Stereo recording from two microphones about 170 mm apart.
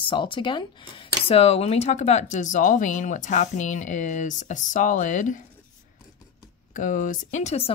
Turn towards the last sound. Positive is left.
turn(degrees=40)  # may be behind; listen again after turning